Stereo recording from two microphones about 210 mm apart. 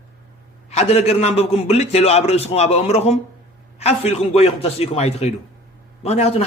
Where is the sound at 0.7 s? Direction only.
30° left (ahead or behind).